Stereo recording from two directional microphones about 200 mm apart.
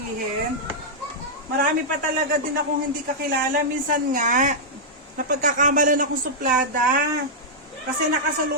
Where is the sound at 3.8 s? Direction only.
40° right (ahead or behind).